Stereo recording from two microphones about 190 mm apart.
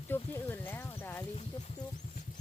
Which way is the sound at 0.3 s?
10° left (ahead or behind).